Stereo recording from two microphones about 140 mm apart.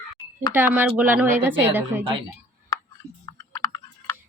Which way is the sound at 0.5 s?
15° right (ahead or behind).